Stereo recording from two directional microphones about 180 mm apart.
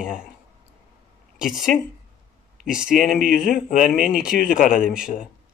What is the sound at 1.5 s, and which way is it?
Speech, centre (ahead or behind).